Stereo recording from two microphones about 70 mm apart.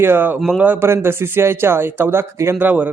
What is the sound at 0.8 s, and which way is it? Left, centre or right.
Speech, right.